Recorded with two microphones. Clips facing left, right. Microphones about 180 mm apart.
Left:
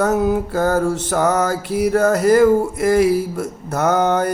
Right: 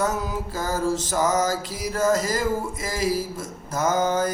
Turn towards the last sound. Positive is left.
turn(degrees=65)  # may be behind; listen again after turning